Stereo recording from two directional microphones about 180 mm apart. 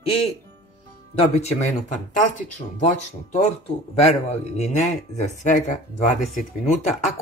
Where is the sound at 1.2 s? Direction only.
35° left (ahead or behind).